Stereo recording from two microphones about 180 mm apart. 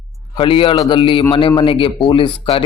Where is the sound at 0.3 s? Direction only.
30° left (ahead or behind).